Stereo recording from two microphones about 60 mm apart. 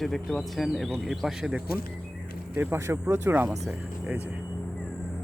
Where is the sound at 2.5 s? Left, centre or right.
Right.